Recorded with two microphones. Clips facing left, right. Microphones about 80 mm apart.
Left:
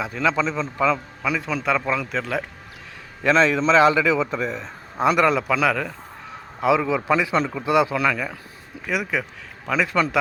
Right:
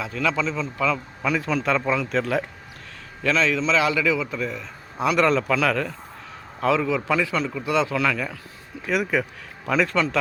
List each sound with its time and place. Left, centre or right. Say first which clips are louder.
0.0 s a man's voice: left 2 dB; left
1.2 s speech: right 1 dB; centre
3.2 s a man's voice: left 4 dB; left
5.1 s a man's voice: right 3 dB; centre
8.9 s speech: right 2 dB; centre
9.9 s a man's voice: left 1 dB; centre